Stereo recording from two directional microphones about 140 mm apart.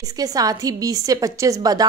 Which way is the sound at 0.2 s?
25° right (ahead or behind).